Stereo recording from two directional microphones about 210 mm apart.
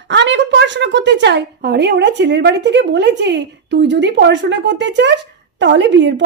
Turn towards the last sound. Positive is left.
turn(degrees=-60)  # may be behind; listen again after turning